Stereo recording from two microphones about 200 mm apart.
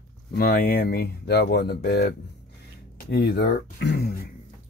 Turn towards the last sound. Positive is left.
turn(degrees=55)  # may be behind; listen again after turning